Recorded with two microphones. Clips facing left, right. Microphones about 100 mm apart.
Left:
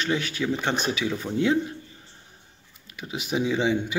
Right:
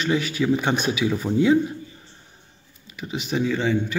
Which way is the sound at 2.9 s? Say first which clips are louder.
Right 2 dB; centre (ahead or behind).